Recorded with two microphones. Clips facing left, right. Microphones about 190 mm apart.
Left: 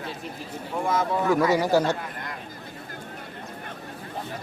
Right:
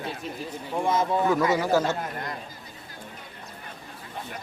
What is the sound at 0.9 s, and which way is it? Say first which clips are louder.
Speech: right 1 dB; 20° right (ahead or behind).